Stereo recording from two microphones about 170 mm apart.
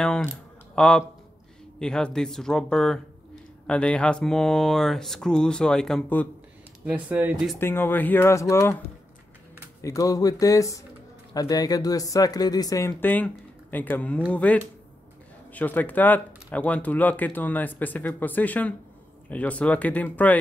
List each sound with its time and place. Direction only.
0.0 s speech: 5° left (ahead or behind)
6.9 s speech: 10° right (ahead or behind)
7.5 s speech: 15° left (ahead or behind)
9.8 s speech: 20° left (ahead or behind)